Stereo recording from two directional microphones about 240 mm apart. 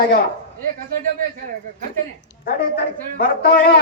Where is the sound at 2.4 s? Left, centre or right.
Left.